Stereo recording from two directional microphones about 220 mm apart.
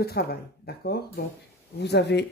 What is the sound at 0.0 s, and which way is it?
Speech, 45° left (ahead or behind).